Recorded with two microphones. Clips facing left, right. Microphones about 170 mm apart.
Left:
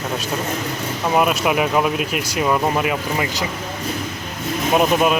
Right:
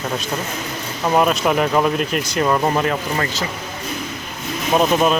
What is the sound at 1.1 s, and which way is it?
Speech, 5° left (ahead or behind).